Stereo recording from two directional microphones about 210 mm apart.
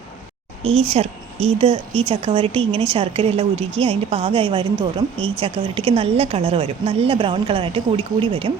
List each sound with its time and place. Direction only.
0.6 s a woman's voice: 30° right (ahead or behind)